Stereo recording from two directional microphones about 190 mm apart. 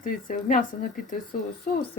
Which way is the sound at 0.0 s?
45° left (ahead or behind).